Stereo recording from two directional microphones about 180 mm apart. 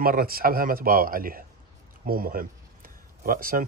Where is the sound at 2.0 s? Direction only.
55° right (ahead or behind).